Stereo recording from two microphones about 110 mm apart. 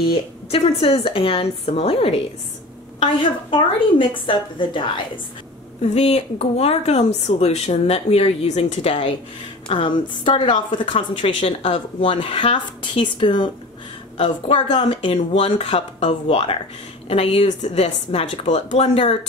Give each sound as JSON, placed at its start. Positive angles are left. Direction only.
{"t": 0.1, "sound": "speech", "side_deg": 60}
{"t": 3.0, "sound": "a woman's voice", "side_deg": 50}
{"t": 5.8, "sound": "speech", "side_deg": 65}
{"t": 9.7, "sound": "a woman's voice", "side_deg": 50}